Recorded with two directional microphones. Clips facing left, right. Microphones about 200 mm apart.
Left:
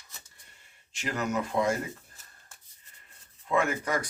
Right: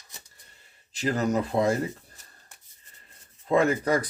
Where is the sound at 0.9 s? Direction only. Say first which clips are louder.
Right 5 dB; 35° right (ahead or behind).